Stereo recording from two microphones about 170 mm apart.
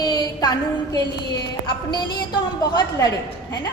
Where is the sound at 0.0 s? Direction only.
25° left (ahead or behind).